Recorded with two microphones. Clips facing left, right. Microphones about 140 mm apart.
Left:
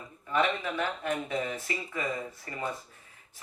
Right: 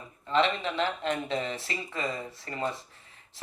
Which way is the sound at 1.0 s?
80° right.